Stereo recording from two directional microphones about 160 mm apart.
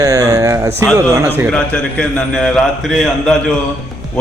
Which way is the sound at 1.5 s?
5° left (ahead or behind).